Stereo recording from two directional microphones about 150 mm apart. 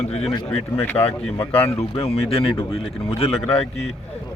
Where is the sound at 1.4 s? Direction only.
40° left (ahead or behind).